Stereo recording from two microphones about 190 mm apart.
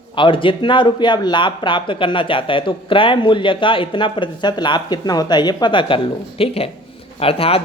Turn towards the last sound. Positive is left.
turn(degrees=30)  # may be behind; listen again after turning